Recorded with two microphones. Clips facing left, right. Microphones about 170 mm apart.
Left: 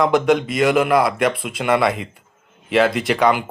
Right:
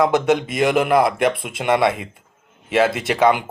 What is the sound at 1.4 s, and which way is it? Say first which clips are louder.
Speech: even; 25° right (ahead or behind).